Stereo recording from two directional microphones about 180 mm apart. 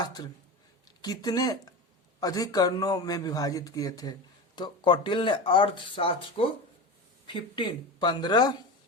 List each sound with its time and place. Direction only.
0.0 s speech: 20° left (ahead or behind)